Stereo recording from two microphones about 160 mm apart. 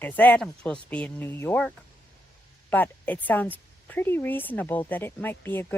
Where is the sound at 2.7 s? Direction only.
10° left (ahead or behind).